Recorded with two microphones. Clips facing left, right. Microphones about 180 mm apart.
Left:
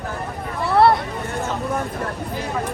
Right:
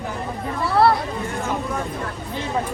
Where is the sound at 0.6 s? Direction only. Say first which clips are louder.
Left 2 dB; 25° left (ahead or behind).